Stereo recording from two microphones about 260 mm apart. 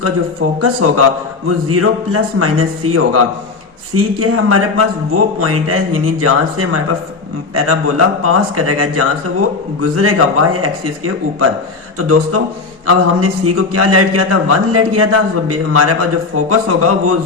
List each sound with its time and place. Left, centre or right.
0.6 s a man's voice: right